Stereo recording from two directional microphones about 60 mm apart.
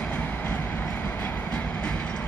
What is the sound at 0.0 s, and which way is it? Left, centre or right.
Train, left.